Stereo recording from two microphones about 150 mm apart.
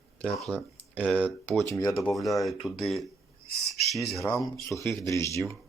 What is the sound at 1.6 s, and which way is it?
Speech, 20° left (ahead or behind).